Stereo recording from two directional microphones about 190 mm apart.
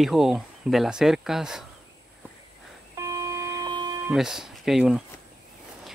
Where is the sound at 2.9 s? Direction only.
15° right (ahead or behind).